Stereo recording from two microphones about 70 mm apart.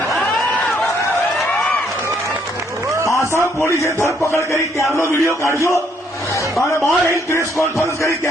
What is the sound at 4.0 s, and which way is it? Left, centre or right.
Speech, left.